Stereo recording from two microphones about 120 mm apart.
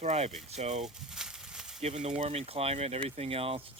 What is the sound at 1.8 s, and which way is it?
Speech, 60° right (ahead or behind).